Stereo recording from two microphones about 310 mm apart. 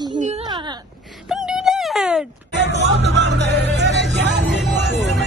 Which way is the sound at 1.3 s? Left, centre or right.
Centre.